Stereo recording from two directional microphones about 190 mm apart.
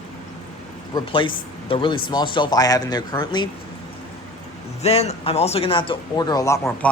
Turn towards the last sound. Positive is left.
turn(degrees=15)  # may be behind; listen again after turning